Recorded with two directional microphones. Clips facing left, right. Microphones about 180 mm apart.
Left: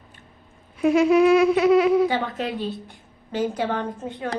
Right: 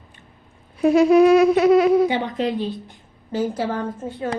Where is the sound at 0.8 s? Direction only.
35° right (ahead or behind).